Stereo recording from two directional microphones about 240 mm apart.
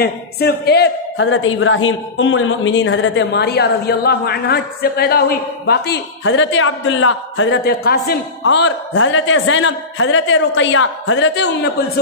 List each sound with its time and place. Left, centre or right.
0.0 s a man's voice: left